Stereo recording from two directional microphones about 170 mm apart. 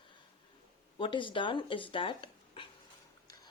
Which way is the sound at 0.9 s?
30° left (ahead or behind).